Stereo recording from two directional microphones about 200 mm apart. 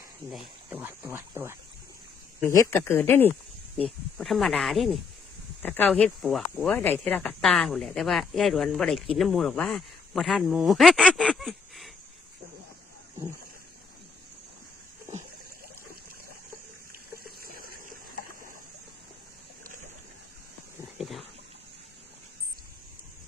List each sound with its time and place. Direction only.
0.3 s speech: 5° right (ahead or behind)
2.4 s speech: 15° left (ahead or behind)
17.2 s water: 45° right (ahead or behind)
21.0 s a sound: centre (ahead or behind)